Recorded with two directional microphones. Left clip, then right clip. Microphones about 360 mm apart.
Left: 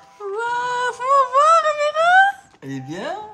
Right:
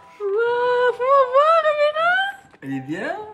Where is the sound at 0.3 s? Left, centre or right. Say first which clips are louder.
Right 3 dB; centre.